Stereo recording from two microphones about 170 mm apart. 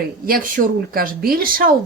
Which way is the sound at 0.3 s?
55° right (ahead or behind).